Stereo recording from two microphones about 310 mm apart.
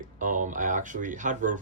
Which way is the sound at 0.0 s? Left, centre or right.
Right.